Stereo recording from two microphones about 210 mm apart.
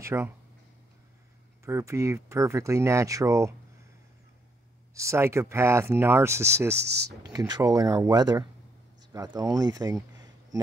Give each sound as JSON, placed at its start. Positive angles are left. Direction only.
{"t": 0.0, "sound": "speech", "side_deg": -10}
{"t": 1.6, "sound": "speech", "side_deg": -15}
{"t": 4.9, "sound": "speech", "side_deg": -15}